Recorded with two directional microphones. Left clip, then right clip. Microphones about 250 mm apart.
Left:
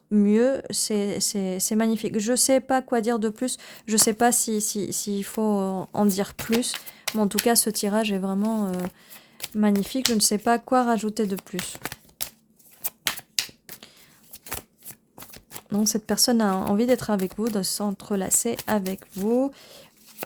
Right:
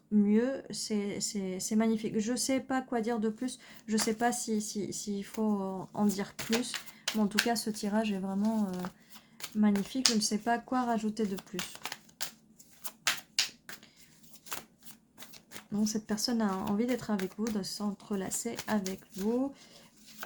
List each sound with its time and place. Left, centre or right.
0.1 s speech: left
15.7 s speech: left